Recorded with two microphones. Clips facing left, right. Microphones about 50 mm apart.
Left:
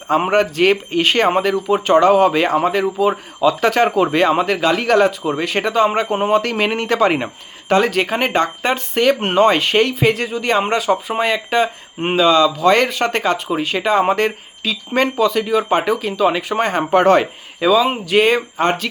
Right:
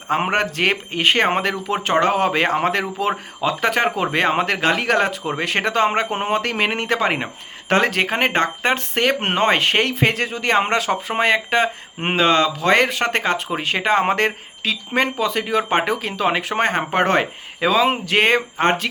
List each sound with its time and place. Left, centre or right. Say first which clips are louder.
0.1 s speech: left 4 dB; right
1.3 s speech: left 5 dB; right
2.6 s a man's voice: left 4 dB; right
3.6 s speech: left 2 dB; right
4.2 s speech: even; right
4.7 s speech: left 6 dB; right
5.5 s speech: left 2 dB; right
7.7 s speech: left 2 dB; right
14.9 s speech: left 5 dB; right
15.3 s speech: left 3 dB; right
18.0 s speech: left 2 dB; right
18.5 s speech: left 1 dB; right